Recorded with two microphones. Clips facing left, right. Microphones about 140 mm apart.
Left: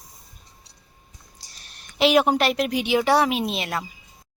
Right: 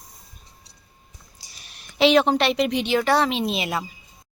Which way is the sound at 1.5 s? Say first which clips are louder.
Right 3 dB; 5° right (ahead or behind).